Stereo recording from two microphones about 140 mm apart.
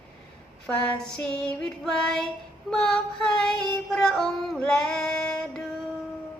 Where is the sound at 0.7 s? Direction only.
5° left (ahead or behind).